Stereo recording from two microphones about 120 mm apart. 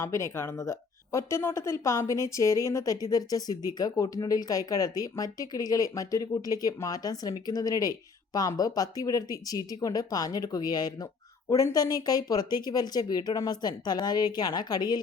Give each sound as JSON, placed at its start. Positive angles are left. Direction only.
{"t": 0.0, "sound": "speech", "side_deg": 25}